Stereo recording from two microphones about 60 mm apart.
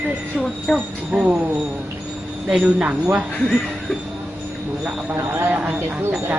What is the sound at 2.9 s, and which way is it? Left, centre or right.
Speech, right.